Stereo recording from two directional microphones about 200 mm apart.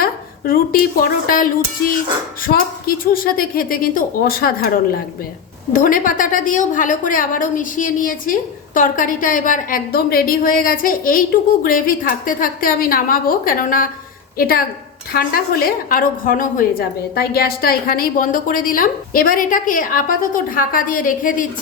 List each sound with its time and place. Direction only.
0.0 s a woman's voice: 45° left (ahead or behind)
5.7 s a woman's voice: 40° left (ahead or behind)